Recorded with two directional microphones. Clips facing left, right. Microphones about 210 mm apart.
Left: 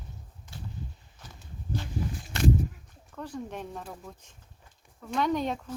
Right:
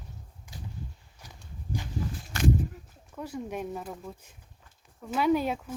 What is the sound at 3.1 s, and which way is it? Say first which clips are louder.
Speech: right 2 dB; 10° right (ahead or behind).